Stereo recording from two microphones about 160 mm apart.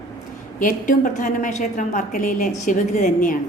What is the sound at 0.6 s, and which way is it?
A woman's voice, 55° left (ahead or behind).